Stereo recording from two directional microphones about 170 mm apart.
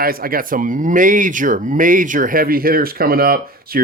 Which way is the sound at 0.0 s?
60° right (ahead or behind).